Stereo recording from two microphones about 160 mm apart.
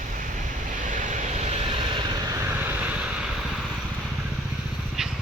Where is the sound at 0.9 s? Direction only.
50° right (ahead or behind).